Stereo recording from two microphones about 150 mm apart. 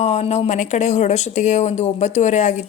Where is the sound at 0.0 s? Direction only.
45° left (ahead or behind).